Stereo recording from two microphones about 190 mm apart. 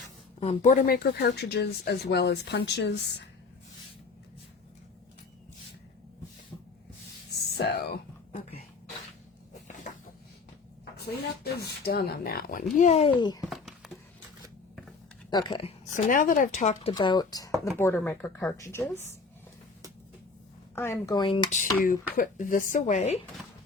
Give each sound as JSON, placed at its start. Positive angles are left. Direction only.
{"t": 0.3, "sound": "speech", "side_deg": 30}
{"t": 7.6, "sound": "speech", "side_deg": 50}
{"t": 11.8, "sound": "speech", "side_deg": 55}
{"t": 13.5, "sound": "a sound", "side_deg": 0}
{"t": 15.3, "sound": "speech", "side_deg": 20}
{"t": 15.9, "sound": "speech", "side_deg": 45}
{"t": 16.9, "sound": "speech", "side_deg": 25}
{"t": 20.7, "sound": "speech", "side_deg": 15}
{"t": 21.5, "sound": "speech", "side_deg": 45}